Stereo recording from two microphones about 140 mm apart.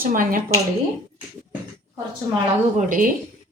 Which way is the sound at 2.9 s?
75° right (ahead or behind).